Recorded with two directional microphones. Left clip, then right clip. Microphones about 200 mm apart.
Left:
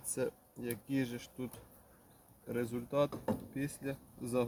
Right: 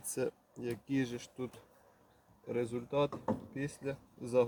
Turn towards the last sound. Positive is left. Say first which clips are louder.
# right 5 dB
turn(degrees=0)  # may be behind; listen again after turning